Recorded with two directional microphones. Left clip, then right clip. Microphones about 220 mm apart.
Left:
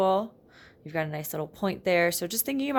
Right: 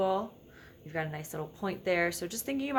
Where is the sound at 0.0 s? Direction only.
40° left (ahead or behind).